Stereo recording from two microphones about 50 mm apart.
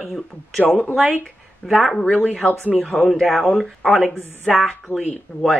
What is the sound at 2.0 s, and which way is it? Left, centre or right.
Speech, centre.